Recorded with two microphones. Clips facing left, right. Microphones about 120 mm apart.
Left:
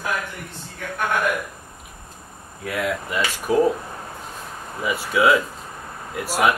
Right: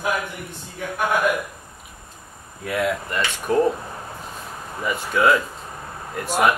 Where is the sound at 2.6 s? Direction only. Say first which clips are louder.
Right 2 dB; centre (ahead or behind).